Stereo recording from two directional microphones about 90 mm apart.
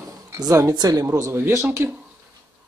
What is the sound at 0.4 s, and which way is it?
Speech, 35° right (ahead or behind).